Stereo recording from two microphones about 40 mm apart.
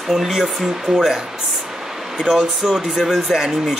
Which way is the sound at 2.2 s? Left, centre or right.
Right.